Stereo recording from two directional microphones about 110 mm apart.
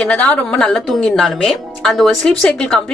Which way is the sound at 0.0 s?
10° left (ahead or behind).